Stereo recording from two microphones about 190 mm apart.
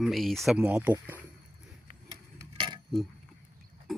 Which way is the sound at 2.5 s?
25° right (ahead or behind).